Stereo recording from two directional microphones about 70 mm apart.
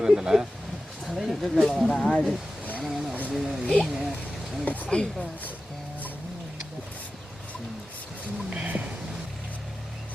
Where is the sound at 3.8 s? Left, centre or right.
Centre.